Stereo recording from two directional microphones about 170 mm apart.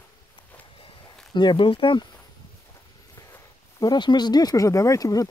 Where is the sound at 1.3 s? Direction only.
30° left (ahead or behind).